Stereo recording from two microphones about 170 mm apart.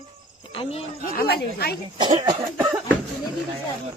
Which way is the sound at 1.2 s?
70° left (ahead or behind).